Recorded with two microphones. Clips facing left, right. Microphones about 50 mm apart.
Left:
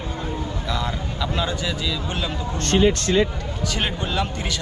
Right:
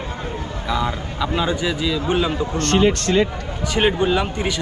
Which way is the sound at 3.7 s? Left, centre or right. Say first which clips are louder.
Right 9 dB; centre.